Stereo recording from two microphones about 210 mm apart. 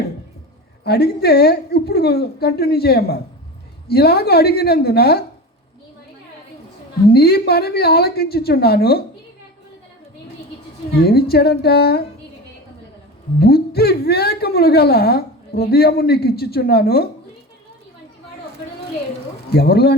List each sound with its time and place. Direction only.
0.9 s a woman's voice: 50° left (ahead or behind)
7.1 s a woman's voice: 50° left (ahead or behind)
10.9 s a woman's voice: 50° left (ahead or behind)
13.4 s a woman's voice: 50° left (ahead or behind)
19.5 s a woman's voice: 50° left (ahead or behind)